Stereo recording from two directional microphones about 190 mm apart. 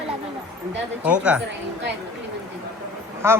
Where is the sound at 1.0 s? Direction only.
5° right (ahead or behind).